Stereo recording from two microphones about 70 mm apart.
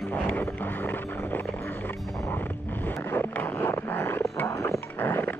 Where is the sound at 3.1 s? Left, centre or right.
Left.